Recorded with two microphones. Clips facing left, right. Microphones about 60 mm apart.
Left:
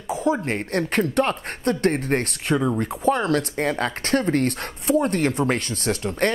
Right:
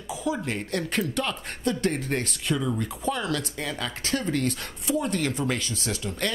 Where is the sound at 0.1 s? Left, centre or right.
Left.